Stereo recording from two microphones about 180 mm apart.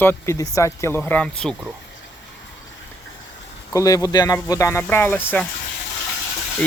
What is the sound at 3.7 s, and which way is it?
Speech, 20° left (ahead or behind).